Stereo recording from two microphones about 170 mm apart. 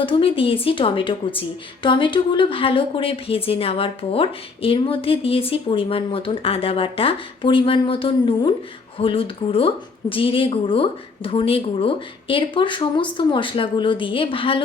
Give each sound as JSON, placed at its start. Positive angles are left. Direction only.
{"t": 0.0, "sound": "a woman's voice", "side_deg": 30}